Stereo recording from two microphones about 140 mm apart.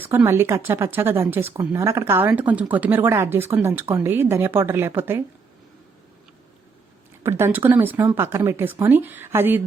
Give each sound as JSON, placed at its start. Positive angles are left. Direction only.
{"t": 0.0, "sound": "a woman's voice", "side_deg": -15}
{"t": 7.2, "sound": "a woman's voice", "side_deg": -20}